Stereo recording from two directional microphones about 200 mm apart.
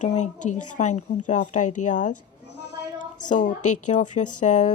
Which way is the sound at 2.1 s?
60° left (ahead or behind).